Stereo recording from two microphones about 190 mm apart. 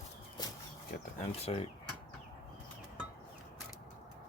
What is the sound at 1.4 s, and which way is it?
Speech, 30° left (ahead or behind).